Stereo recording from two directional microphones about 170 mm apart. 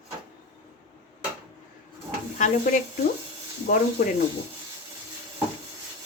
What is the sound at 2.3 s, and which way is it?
Speech, 50° left (ahead or behind).